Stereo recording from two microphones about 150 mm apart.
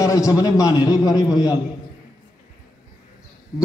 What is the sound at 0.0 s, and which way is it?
A man's voice, 25° left (ahead or behind).